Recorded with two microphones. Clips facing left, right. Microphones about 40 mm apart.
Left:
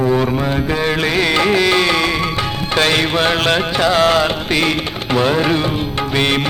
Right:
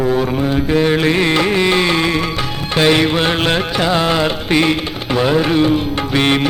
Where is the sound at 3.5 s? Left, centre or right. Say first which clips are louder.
Left 1 dB; centre.